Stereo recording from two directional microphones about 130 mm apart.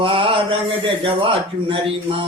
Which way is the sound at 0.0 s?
40° right (ahead or behind).